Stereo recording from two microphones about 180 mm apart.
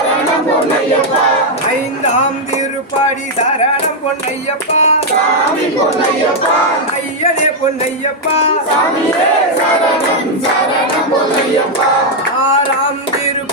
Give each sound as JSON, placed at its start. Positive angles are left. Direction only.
{"t": 4.7, "sound": "music", "side_deg": 40}